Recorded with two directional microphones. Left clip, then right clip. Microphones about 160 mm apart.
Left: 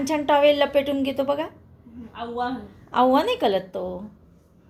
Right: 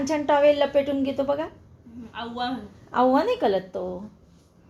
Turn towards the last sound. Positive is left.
turn(degrees=5)  # may be behind; listen again after turning